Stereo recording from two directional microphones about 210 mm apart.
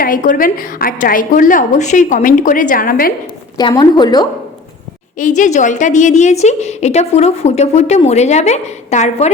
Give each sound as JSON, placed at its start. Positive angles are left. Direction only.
{"t": 0.0, "sound": "a woman's voice", "side_deg": 40}
{"t": 3.6, "sound": "a woman's voice", "side_deg": 20}
{"t": 5.1, "sound": "a woman's voice", "side_deg": 40}